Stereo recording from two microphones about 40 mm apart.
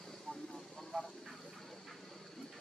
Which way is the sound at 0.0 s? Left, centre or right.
Centre.